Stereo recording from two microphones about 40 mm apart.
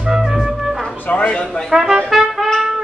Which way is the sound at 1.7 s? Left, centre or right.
Centre.